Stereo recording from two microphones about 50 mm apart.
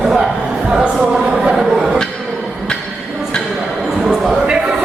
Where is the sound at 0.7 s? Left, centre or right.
Right.